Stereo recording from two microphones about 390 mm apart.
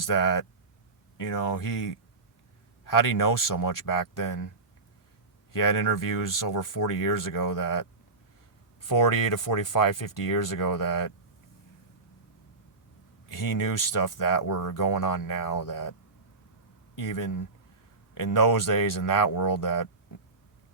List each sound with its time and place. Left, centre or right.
0.0 s speech: left
8.9 s speech: left
13.3 s speech: left